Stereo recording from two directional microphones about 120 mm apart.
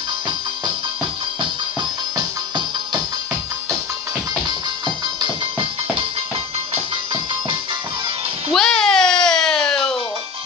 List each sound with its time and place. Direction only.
1.4 s music: 40° right (ahead or behind)
5.0 s music: 40° right (ahead or behind)
8.5 s music: 5° left (ahead or behind)